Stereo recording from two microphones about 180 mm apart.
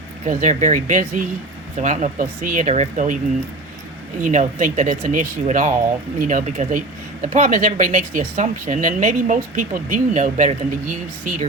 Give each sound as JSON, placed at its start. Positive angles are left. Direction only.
{"t": 0.3, "sound": "speech", "side_deg": -45}
{"t": 4.2, "sound": "speech", "side_deg": -45}